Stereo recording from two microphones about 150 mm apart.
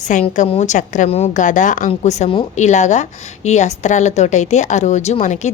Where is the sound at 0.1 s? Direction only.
55° left (ahead or behind).